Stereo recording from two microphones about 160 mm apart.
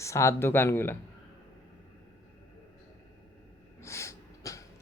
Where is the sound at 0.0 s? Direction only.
15° left (ahead or behind).